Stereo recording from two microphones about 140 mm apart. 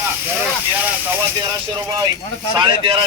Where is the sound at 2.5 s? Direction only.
35° right (ahead or behind).